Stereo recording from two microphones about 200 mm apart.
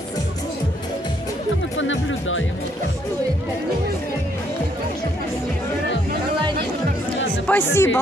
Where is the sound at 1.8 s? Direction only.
70° left (ahead or behind).